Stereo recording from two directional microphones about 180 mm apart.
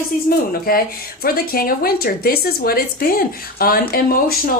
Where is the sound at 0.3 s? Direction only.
55° left (ahead or behind).